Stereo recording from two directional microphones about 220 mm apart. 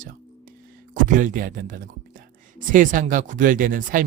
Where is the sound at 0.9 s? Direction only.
35° right (ahead or behind).